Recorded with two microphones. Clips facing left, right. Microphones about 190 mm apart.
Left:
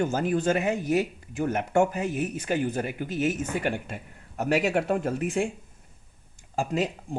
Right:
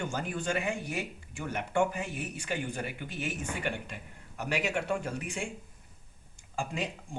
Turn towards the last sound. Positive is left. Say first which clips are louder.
# left 9 dB
turn(degrees=40)  # may be behind; listen again after turning